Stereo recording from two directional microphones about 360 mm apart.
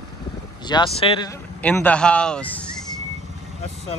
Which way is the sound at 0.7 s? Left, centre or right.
Centre.